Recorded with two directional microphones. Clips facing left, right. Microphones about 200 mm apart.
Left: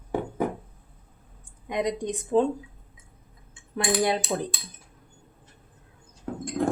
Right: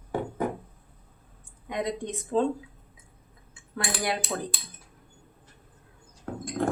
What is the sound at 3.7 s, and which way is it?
Cutlery, 20° left (ahead or behind).